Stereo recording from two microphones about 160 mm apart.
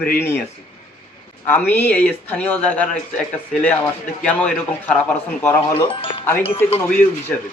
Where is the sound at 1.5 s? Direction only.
10° left (ahead or behind).